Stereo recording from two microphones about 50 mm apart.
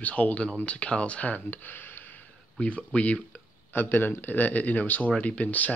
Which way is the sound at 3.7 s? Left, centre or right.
Left.